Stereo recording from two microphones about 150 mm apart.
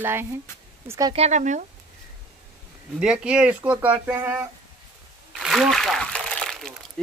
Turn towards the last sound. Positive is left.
turn(degrees=5)  # may be behind; listen again after turning